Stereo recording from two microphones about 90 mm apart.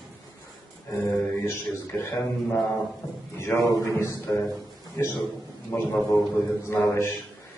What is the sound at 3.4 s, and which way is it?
A man's voice, 30° left (ahead or behind).